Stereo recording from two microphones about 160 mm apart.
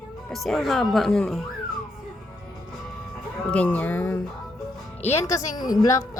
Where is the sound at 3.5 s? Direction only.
10° left (ahead or behind).